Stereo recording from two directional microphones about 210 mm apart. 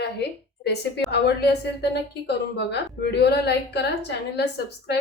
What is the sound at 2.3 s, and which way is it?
A woman's voice, 55° left (ahead or behind).